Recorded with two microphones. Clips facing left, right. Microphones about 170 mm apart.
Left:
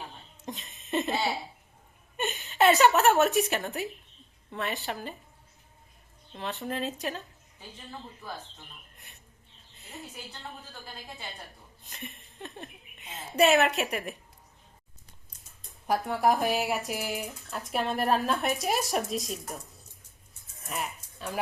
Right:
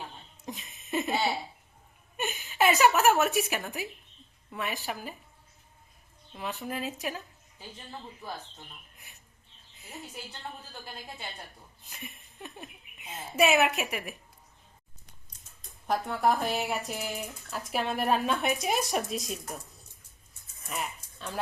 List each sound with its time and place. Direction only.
0.0 s a sound: centre (ahead or behind)
2.1 s a woman's voice: centre (ahead or behind)
6.3 s speech: 5° right (ahead or behind)
9.0 s a sound: centre (ahead or behind)
9.7 s a woman's voice: centre (ahead or behind)
16.1 s speech: 40° left (ahead or behind)
16.6 s speech: centre (ahead or behind)
20.7 s music: centre (ahead or behind)